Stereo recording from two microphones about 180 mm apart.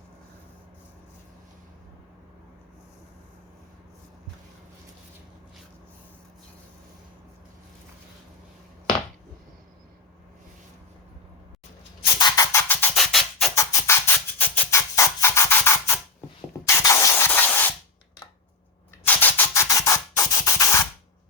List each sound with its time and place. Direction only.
12.2 s music: 15° left (ahead or behind); by 13.5 s centre (ahead or behind)
13.6 s music: 15° left (ahead or behind)
16.6 s spray: 15° left (ahead or behind)
19.0 s rub: 10° left (ahead or behind)